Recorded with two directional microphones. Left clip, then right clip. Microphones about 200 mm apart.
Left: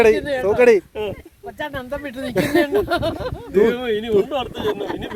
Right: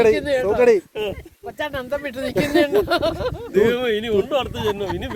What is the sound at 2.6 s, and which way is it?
Speech, 15° right (ahead or behind).